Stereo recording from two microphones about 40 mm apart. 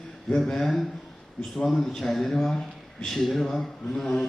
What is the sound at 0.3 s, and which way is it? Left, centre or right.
Speech, centre.